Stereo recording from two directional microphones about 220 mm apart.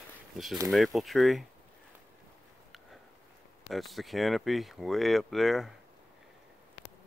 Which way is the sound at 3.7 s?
Centre (ahead or behind).